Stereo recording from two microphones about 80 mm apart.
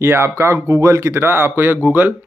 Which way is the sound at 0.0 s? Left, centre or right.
Right.